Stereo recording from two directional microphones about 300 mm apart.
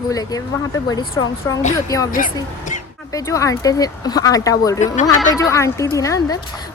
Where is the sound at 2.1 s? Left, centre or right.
Left.